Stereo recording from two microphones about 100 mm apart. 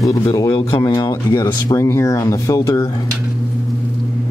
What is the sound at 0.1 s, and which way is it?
Speech, 40° left (ahead or behind).